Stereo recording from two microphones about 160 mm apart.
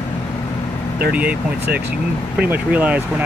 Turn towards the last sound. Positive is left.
turn(degrees=-10)  # may be behind; listen again after turning